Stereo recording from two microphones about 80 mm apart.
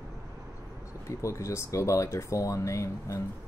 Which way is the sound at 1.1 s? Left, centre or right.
Left.